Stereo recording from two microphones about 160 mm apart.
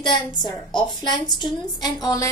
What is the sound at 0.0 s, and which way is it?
A woman's voice, 30° left (ahead or behind).